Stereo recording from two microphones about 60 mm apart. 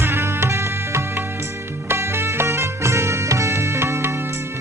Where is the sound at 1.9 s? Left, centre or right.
Right.